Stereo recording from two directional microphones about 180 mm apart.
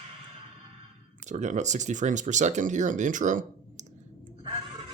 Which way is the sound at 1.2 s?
40° right (ahead or behind).